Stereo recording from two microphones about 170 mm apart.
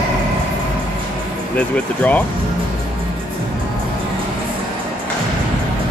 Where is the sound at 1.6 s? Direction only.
10° left (ahead or behind).